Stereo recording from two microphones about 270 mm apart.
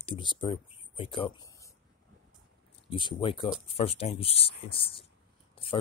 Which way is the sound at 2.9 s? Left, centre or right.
Centre.